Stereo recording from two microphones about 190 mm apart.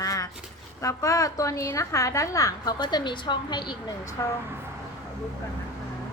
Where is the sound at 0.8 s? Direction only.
15° left (ahead or behind).